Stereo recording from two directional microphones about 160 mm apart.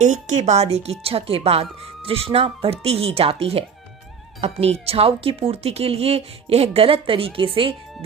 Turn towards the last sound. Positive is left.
turn(degrees=-35)  # may be behind; listen again after turning